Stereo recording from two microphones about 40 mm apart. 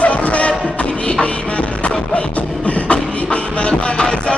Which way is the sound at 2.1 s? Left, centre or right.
Left.